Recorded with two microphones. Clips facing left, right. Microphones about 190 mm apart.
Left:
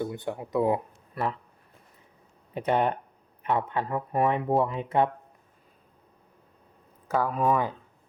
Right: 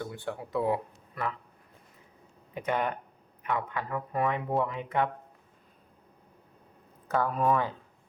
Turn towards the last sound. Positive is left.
turn(degrees=5)  # may be behind; listen again after turning